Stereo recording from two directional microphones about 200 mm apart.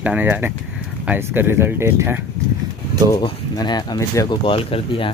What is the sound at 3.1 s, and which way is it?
Speech, 20° left (ahead or behind).